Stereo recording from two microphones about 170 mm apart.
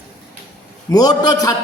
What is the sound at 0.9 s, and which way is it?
Speech, 25° left (ahead or behind).